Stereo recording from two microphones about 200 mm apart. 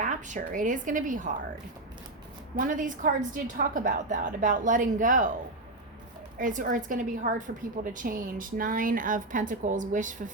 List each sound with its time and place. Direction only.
0.0 s a woman's voice: 40° right (ahead or behind)
2.6 s a woman's voice: 40° right (ahead or behind)
6.4 s a woman's voice: 40° right (ahead or behind)